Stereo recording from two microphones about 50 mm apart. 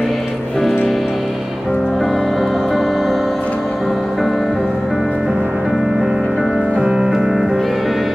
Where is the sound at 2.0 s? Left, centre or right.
Centre.